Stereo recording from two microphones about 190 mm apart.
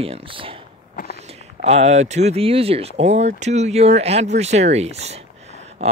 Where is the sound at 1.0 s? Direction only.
50° left (ahead or behind).